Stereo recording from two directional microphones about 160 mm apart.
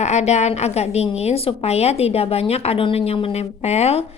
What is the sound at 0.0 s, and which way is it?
A woman's voice, 45° left (ahead or behind).